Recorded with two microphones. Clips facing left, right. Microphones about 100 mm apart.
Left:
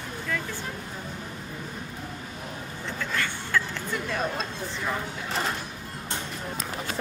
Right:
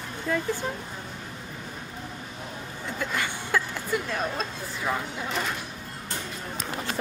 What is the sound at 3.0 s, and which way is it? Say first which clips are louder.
Speech: right 1 dB; 15° right (ahead or behind).